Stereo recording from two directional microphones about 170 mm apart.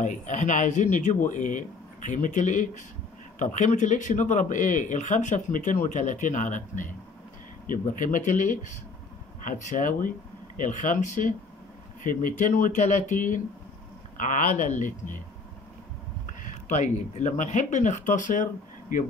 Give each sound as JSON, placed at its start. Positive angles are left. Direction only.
{"t": 0.0, "sound": "speech", "side_deg": 45}
{"t": 16.3, "sound": "speech", "side_deg": 45}